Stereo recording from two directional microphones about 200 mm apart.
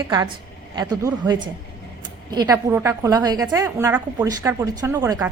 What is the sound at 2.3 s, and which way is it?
A woman's voice, 20° right (ahead or behind).